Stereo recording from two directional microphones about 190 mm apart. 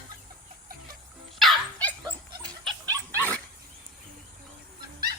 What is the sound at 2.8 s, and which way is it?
Dog, 15° right (ahead or behind).